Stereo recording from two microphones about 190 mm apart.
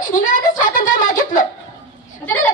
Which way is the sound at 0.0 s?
40° left (ahead or behind).